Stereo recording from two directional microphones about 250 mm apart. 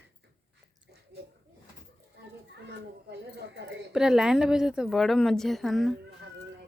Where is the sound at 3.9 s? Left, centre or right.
Centre.